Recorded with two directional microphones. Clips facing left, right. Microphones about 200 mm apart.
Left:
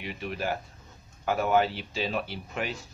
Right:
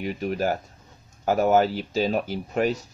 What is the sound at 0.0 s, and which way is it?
Speech, 40° right (ahead or behind).